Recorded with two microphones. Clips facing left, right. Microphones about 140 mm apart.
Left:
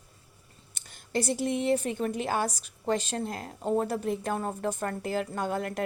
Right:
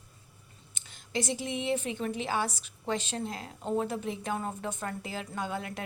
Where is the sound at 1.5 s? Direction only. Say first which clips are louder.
Left 5 dB; 45° left (ahead or behind).